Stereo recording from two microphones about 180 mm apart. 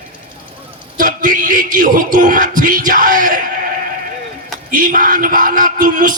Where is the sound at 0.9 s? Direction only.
45° right (ahead or behind).